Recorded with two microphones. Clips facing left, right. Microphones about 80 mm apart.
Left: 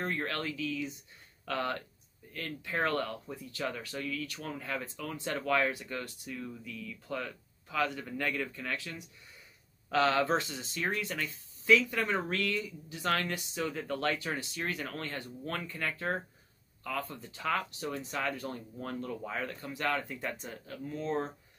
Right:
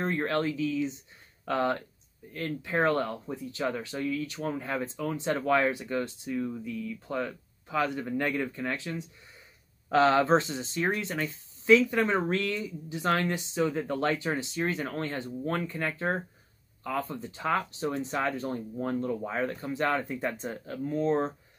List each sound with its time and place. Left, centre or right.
0.0 s speech: right